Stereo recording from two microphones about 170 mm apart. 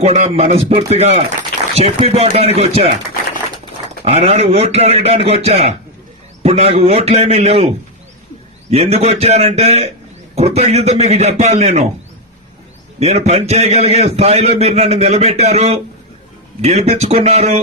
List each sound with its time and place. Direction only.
0.0 s a man's voice: 40° right (ahead or behind)
1.4 s a sound: 40° right (ahead or behind)
2.2 s a man's voice: 40° right (ahead or behind)
4.0 s a man's voice: 35° right (ahead or behind)
8.7 s a man's voice: 40° right (ahead or behind)
13.0 s a man's voice: 40° right (ahead or behind)